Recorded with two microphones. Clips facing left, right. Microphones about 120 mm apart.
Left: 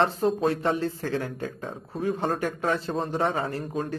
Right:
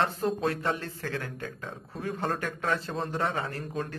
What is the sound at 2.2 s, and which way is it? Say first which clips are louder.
Speech: left 1 dB; 5° left (ahead or behind).